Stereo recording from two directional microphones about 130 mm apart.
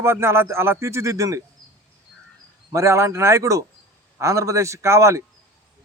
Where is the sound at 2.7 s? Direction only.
20° right (ahead or behind).